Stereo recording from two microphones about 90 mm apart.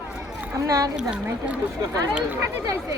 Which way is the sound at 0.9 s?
10° right (ahead or behind).